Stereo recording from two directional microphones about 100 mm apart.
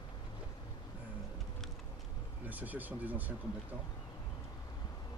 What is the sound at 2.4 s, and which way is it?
Speech, 15° right (ahead or behind).